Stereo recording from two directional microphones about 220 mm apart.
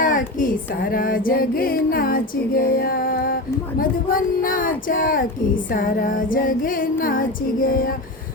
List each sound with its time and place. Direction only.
0.0 s music: 40° left (ahead or behind)